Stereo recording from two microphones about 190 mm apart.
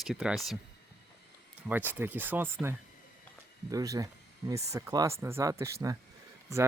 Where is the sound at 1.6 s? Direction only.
10° right (ahead or behind).